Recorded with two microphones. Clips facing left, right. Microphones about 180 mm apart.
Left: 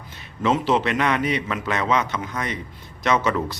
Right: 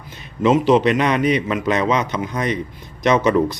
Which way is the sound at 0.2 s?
15° right (ahead or behind).